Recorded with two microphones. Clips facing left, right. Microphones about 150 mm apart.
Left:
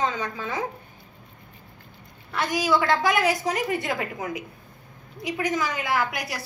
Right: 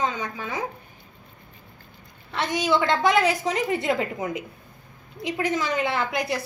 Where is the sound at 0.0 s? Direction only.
20° right (ahead or behind).